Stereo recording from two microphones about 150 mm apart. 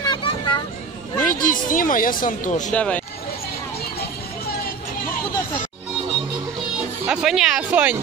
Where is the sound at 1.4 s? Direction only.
65° left (ahead or behind).